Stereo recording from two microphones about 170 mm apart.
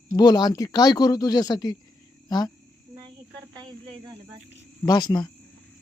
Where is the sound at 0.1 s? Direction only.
25° left (ahead or behind).